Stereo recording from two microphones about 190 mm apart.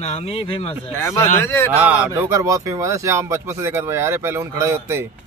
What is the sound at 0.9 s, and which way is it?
Speech, 15° left (ahead or behind).